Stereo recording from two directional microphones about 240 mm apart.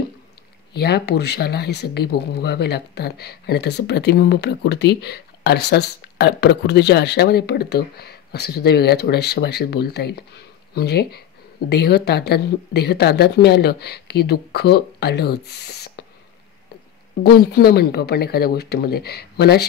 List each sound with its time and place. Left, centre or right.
0.7 s speech: left
17.2 s speech: left